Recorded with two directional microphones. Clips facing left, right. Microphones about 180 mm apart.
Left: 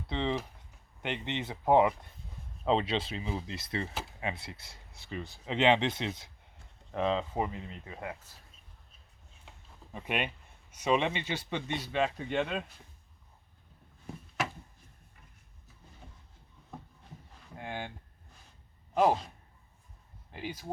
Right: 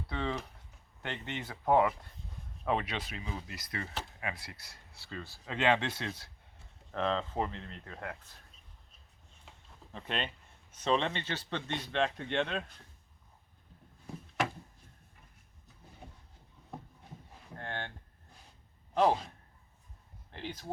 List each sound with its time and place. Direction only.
0.1 s speech: 20° left (ahead or behind)
6.9 s speech: 10° left (ahead or behind)
9.5 s speech: 10° left (ahead or behind)
17.5 s a sound: 10° left (ahead or behind)
20.3 s speech: 10° left (ahead or behind)